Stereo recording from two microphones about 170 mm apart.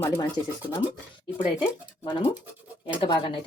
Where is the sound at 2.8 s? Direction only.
30° left (ahead or behind).